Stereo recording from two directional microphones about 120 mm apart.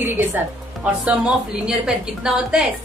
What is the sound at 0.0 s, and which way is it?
Music, 15° right (ahead or behind).